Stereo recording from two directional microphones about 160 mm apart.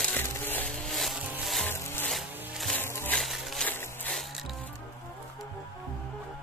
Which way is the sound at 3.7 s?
10° left (ahead or behind).